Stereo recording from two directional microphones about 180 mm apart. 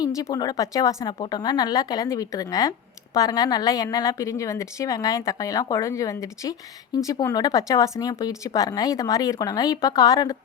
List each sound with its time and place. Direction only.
0.2 s a woman's voice: 20° left (ahead or behind)